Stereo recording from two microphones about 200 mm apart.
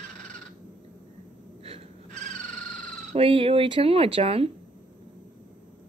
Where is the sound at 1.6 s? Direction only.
35° right (ahead or behind).